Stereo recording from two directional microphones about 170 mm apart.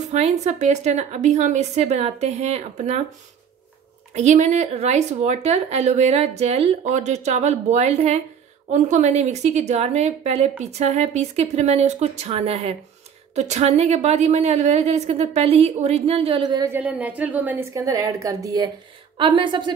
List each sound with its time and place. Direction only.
0.0 s speech: 40° right (ahead or behind)
4.1 s speech: 45° right (ahead or behind)
16.4 s a woman's voice: 20° right (ahead or behind)
16.7 s a woman's voice: 10° right (ahead or behind); by 19.7 s 30° right (ahead or behind)